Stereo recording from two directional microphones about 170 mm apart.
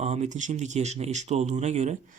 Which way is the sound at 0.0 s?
40° right (ahead or behind).